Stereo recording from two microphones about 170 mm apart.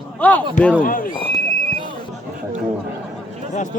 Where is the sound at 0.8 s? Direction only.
55° left (ahead or behind).